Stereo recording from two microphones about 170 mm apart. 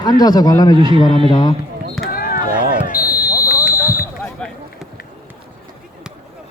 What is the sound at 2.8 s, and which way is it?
Basketball bounce, 60° left (ahead or behind).